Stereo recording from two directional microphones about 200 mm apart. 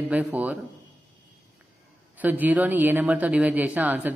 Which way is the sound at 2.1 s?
10° right (ahead or behind).